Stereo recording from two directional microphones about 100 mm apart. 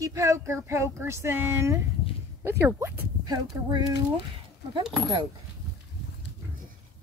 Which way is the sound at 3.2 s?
45° right (ahead or behind).